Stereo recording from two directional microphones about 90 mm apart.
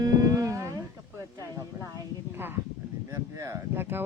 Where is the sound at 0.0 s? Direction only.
45° right (ahead or behind).